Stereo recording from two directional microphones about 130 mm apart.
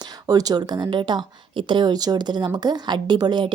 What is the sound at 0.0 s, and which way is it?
A woman's voice, 30° right (ahead or behind).